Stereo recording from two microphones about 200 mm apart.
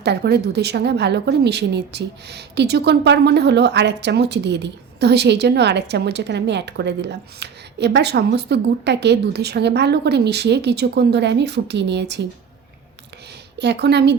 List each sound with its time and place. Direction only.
0.0 s a woman's voice: 55° right (ahead or behind)
13.6 s a woman's voice: 60° right (ahead or behind)